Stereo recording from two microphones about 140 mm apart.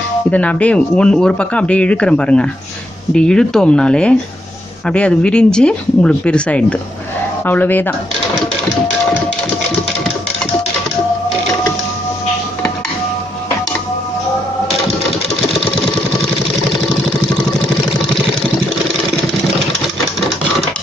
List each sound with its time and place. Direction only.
0.3 s speech: 10° left (ahead or behind)